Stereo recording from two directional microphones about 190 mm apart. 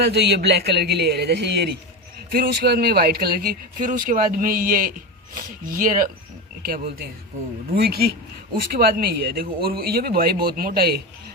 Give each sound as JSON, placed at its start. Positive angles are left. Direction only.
{"t": 0.0, "sound": "speech", "side_deg": -60}